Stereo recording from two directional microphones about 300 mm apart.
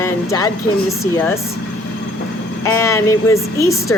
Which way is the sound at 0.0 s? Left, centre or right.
Centre.